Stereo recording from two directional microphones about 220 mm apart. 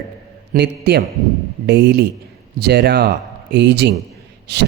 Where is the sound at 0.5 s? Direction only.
50° right (ahead or behind).